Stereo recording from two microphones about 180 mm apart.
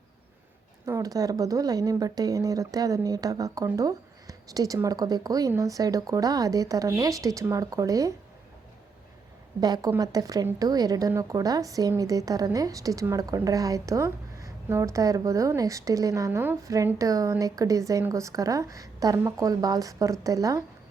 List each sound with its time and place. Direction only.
0.9 s speech: 20° right (ahead or behind)
9.6 s speech: 20° right (ahead or behind)